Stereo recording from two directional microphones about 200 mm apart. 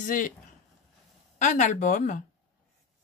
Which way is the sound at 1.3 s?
40° left (ahead or behind).